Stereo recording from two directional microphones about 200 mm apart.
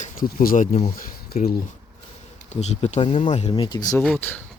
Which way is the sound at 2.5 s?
35° left (ahead or behind).